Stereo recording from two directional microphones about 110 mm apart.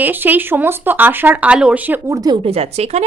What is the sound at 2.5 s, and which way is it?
Speech, 70° right (ahead or behind).